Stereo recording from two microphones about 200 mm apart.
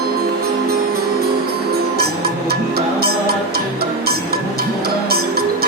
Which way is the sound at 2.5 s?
50° right (ahead or behind).